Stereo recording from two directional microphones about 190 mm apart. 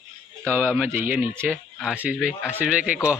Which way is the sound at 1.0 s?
10° right (ahead or behind).